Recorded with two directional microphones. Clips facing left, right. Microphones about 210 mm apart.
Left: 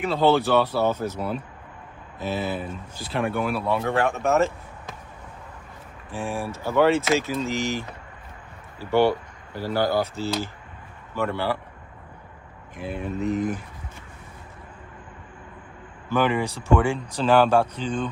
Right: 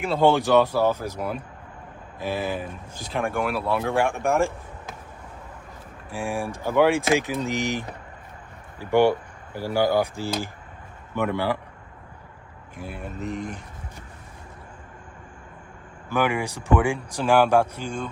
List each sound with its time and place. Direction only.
0.2 s speech: 15° right (ahead or behind)
3.1 s speech: centre (ahead or behind)
3.8 s speech: 10° right (ahead or behind)
6.1 s speech: 10° right (ahead or behind)
12.8 s speech: 5° right (ahead or behind)
16.0 s speech: 10° right (ahead or behind)